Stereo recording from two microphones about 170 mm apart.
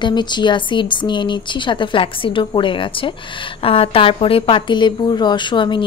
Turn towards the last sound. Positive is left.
turn(degrees=30)  # may be behind; listen again after turning